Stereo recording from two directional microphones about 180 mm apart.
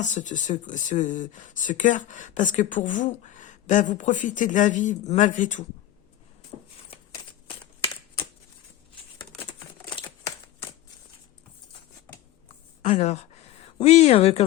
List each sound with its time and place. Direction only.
0.0 s speech: 45° left (ahead or behind)
12.8 s speech: 35° left (ahead or behind)